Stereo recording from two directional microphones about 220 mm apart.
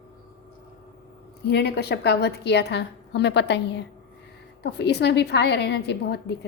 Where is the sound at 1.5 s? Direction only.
50° left (ahead or behind).